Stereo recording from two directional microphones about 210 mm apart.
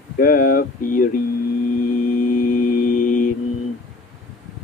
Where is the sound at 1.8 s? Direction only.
40° left (ahead or behind).